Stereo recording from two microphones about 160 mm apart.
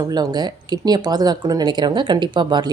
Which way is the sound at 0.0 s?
25° right (ahead or behind).